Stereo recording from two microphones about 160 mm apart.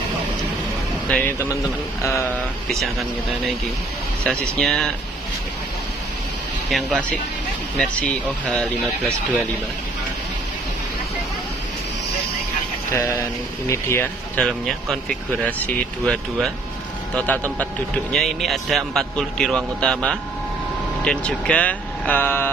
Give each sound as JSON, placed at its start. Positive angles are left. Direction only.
{"t": 1.0, "sound": "a man's voice", "side_deg": 10}
{"t": 6.7, "sound": "a man's voice", "side_deg": 5}
{"t": 12.9, "sound": "speech", "side_deg": 20}
{"t": 14.4, "sound": "a man's voice", "side_deg": 0}